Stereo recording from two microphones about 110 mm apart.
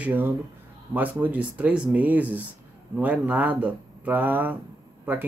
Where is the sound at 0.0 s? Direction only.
15° right (ahead or behind).